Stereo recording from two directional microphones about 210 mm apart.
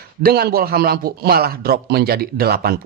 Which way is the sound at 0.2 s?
45° right (ahead or behind).